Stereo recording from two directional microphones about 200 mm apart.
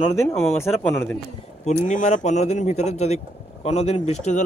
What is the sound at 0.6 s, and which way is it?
Speech, 10° left (ahead or behind).